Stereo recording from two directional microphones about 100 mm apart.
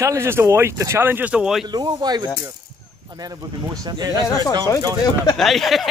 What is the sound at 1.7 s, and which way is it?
Speech, 45° right (ahead or behind).